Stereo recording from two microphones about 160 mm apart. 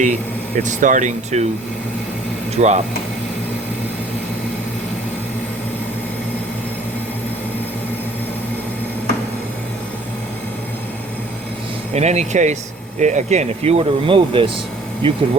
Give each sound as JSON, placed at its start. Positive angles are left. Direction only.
{"t": 0.0, "sound": "speech", "side_deg": -50}
{"t": 2.6, "sound": "speech", "side_deg": -45}
{"t": 11.9, "sound": "speech", "side_deg": -45}